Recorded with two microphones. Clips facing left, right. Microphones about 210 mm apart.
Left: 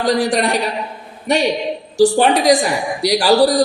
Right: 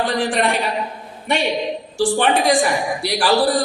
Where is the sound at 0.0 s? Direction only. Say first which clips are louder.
Left 3 dB; 40° left (ahead or behind).